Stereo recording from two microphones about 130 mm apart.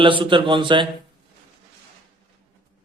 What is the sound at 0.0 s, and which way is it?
Speech, 40° right (ahead or behind).